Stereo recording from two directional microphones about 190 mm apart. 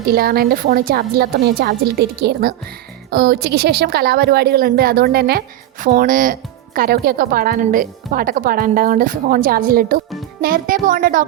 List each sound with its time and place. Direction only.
0.0 s speech: 50° right (ahead or behind)